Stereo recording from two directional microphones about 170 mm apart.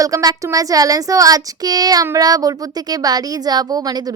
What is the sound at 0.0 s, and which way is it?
A woman's voice, 20° right (ahead or behind).